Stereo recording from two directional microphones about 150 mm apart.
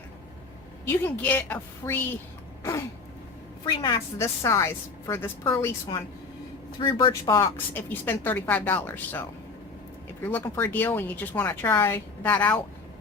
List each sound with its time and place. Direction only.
0.9 s a woman's voice: 15° left (ahead or behind)
3.7 s a woman's voice: 30° left (ahead or behind)
6.7 s a woman's voice: 30° left (ahead or behind); by 9.2 s 10° left (ahead or behind)
10.2 s a woman's voice: 15° left (ahead or behind)